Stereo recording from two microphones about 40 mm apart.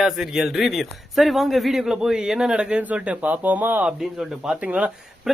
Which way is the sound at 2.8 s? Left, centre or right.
Right.